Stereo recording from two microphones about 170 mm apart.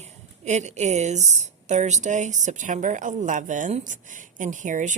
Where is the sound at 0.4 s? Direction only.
45° right (ahead or behind).